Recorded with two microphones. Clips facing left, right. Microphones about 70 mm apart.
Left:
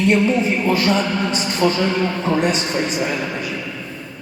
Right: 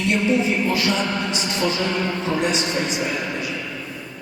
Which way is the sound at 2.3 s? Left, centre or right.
Left.